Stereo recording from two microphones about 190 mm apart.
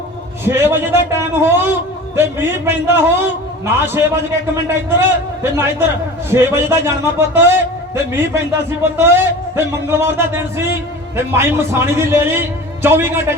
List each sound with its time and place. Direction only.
0.4 s a man's voice: 10° right (ahead or behind)